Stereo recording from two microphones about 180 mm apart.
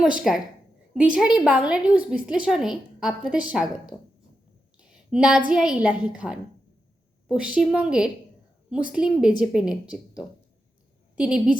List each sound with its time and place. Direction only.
0.0 s a woman's voice: centre (ahead or behind)
4.8 s a sound: 5° right (ahead or behind)
5.5 s a woman's voice: 5° right (ahead or behind)